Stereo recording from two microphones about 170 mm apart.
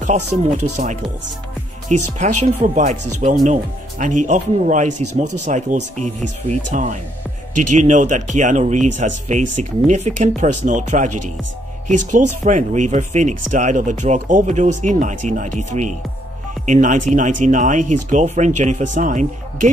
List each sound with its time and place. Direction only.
0.0 s speech: 45° right (ahead or behind)
12.1 s speech: 45° right (ahead or behind)